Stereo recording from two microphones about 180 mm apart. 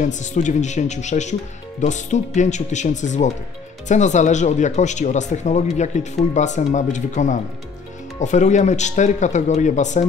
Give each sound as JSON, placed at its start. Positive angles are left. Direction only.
{"t": 0.0, "sound": "speech", "side_deg": 40}